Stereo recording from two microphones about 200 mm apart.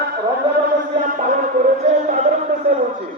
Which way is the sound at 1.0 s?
40° right (ahead or behind).